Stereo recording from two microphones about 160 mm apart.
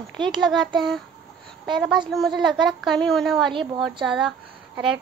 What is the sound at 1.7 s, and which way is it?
A woman's voice, centre (ahead or behind).